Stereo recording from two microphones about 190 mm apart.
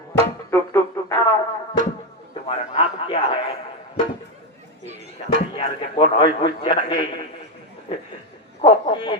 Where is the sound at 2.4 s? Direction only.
30° left (ahead or behind).